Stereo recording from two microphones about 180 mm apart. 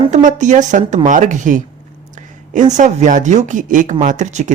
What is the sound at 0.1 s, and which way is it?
A man's voice, 45° right (ahead or behind).